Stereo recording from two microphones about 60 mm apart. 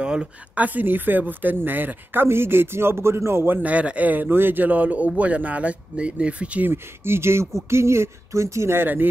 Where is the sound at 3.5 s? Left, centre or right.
Right.